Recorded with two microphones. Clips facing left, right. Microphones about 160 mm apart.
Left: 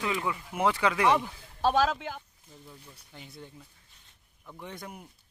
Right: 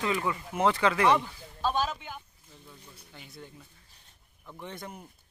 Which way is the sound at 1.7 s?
90° left.